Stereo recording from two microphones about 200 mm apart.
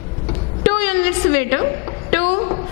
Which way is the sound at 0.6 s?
10° left (ahead or behind).